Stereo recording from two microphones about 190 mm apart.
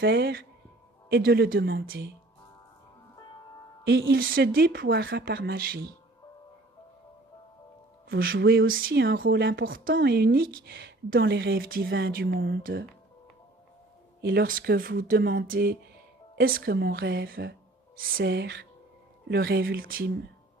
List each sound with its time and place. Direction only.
0.0 s speech: 55° right (ahead or behind)
3.8 s a woman's voice: 90° right
4.1 s speech: 55° right (ahead or behind)
8.2 s speech: 55° right (ahead or behind)
8.8 s speech: 55° right (ahead or behind)
14.2 s speech: 50° right (ahead or behind)